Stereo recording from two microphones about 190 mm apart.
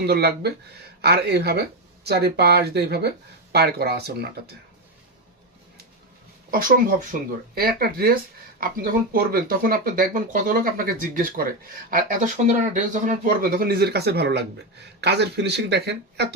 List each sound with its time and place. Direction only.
0.0 s speech: 55° right (ahead or behind)
6.5 s speech: 45° right (ahead or behind)